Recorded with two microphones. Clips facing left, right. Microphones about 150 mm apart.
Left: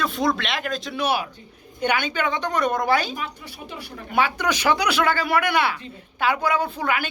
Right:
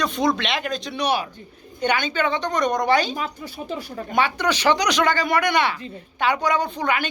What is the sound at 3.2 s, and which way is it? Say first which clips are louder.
Speech: right 4 dB; 40° right (ahead or behind).